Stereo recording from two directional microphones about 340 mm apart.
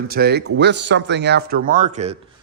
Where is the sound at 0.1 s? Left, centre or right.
Right.